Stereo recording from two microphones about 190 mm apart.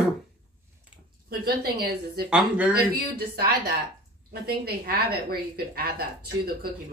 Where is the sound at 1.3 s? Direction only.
55° right (ahead or behind).